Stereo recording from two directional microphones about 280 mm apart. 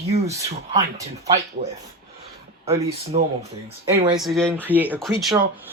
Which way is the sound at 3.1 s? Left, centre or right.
Right.